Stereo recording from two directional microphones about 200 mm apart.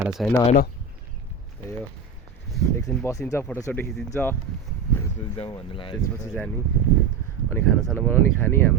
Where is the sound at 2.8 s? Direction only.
15° left (ahead or behind).